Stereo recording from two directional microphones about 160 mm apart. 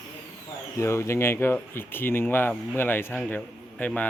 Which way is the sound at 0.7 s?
15° left (ahead or behind).